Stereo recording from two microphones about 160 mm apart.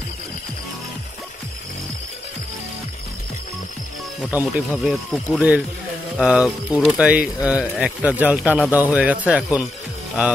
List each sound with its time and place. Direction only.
4.3 s speech: 10° right (ahead or behind)